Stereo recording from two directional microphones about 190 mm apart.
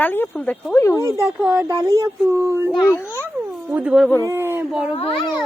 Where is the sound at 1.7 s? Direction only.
20° right (ahead or behind).